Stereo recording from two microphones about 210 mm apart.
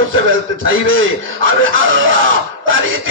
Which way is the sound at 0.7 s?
70° right (ahead or behind).